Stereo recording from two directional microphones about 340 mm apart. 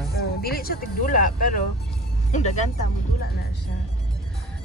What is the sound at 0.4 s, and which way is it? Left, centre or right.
Speech, left.